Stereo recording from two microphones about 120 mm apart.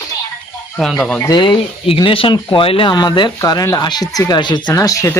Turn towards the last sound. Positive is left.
turn(degrees=25)  # may be behind; listen again after turning